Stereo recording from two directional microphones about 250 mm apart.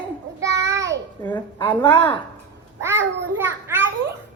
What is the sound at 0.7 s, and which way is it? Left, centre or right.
Child singing, right.